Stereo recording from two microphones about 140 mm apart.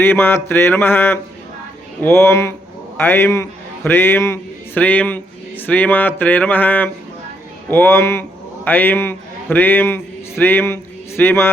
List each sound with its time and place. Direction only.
0.0 s a man's voice: 15° left (ahead or behind)